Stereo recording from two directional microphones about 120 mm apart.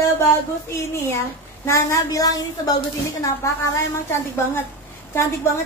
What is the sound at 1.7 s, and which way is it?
A woman's voice, 25° left (ahead or behind).